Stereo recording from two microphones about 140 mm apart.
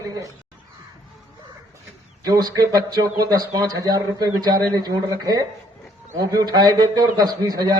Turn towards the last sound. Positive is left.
turn(degrees=-30)  # may be behind; listen again after turning